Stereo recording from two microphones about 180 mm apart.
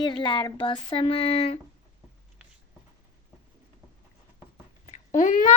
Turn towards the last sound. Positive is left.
turn(degrees=45)  # may be behind; listen again after turning